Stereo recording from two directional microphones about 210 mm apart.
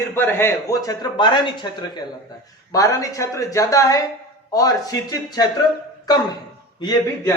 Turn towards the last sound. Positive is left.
turn(degrees=20)  # may be behind; listen again after turning